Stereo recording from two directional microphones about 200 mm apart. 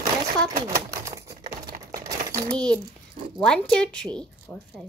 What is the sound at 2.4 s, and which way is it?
A woman's voice, 5° left (ahead or behind).